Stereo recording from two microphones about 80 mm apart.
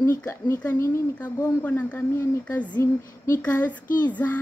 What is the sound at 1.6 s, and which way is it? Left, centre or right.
Speech, left.